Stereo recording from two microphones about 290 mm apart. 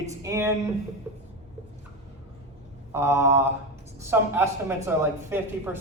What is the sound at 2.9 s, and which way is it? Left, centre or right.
Speech, centre.